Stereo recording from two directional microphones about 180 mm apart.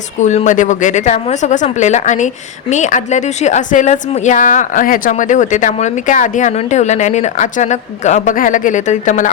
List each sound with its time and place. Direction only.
0.2 s speech: 40° left (ahead or behind)